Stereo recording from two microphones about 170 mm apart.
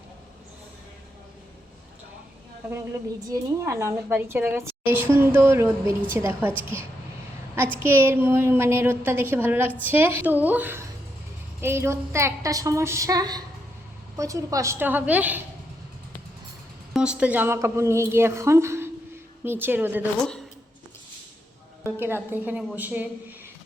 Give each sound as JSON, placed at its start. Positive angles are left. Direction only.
{"t": 3.2, "sound": "a woman's voice", "side_deg": -20}
{"t": 7.8, "sound": "a woman's voice", "side_deg": -15}
{"t": 16.9, "sound": "a woman's voice", "side_deg": -5}
{"t": 21.8, "sound": "a woman's voice", "side_deg": -15}